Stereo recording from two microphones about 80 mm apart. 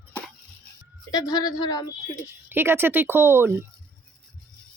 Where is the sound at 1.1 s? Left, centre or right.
Left.